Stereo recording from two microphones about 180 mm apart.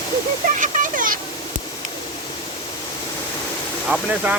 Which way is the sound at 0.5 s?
45° right (ahead or behind).